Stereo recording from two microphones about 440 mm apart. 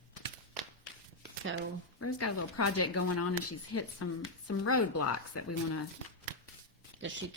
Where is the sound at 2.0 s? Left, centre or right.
Left.